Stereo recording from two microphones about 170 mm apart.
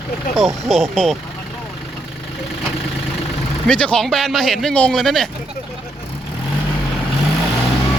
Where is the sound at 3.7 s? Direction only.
5° left (ahead or behind).